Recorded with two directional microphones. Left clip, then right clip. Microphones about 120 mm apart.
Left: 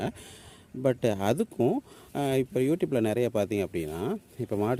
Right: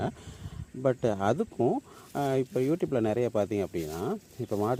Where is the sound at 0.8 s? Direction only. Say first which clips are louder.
Left 1 dB; 40° left (ahead or behind).